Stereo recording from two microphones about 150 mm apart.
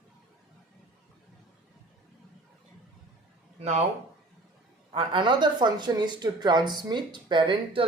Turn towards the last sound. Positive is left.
turn(degrees=-35)  # may be behind; listen again after turning